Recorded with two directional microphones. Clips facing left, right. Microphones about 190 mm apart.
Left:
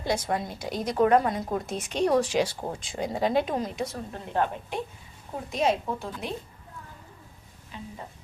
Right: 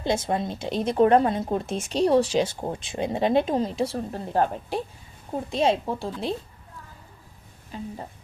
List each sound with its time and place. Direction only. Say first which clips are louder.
0.0 s speech: right 3 dB; 25° right (ahead or behind)
7.7 s a woman's voice: right 6 dB; 40° right (ahead or behind)